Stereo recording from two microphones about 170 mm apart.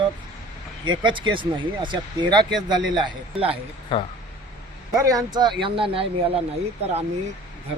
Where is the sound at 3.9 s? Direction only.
30° left (ahead or behind).